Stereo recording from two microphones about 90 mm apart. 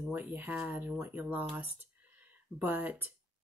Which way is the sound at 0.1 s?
25° right (ahead or behind).